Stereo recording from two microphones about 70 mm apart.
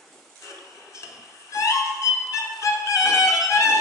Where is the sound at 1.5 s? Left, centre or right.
Left.